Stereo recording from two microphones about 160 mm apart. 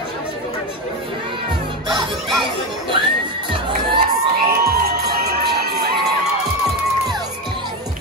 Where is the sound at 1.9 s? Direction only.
30° right (ahead or behind).